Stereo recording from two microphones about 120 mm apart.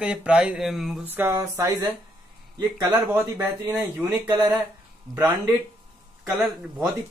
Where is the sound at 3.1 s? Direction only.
25° right (ahead or behind).